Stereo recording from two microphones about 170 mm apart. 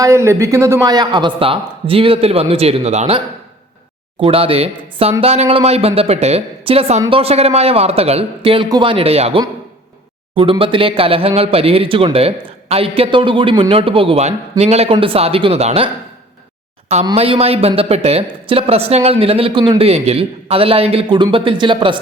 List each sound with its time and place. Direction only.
0.0 s speech: 15° right (ahead or behind); by 3.2 s 40° right (ahead or behind)
4.2 s speech: 35° right (ahead or behind)
17.2 s speech: 35° right (ahead or behind)